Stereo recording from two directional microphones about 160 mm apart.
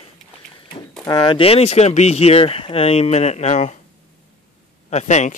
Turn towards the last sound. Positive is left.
turn(degrees=45)  # may be behind; listen again after turning